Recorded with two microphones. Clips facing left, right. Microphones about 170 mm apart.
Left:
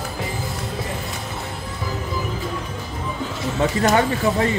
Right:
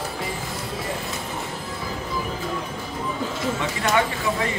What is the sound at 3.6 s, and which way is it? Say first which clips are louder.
Speech: left 6 dB; 40° left (ahead or behind).